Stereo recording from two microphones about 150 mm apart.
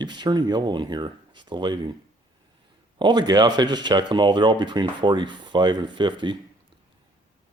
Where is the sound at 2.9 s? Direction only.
30° right (ahead or behind).